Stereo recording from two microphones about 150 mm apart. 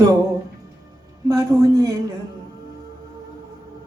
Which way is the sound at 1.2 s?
25° right (ahead or behind).